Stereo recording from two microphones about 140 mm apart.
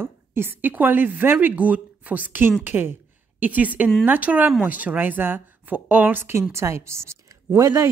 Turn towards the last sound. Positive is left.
turn(degrees=-20)  # may be behind; listen again after turning